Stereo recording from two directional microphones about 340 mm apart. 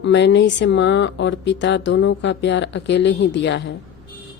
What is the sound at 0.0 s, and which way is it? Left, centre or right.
Speech, left.